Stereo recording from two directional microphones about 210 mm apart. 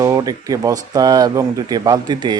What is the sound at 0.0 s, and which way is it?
Speech, 15° right (ahead or behind).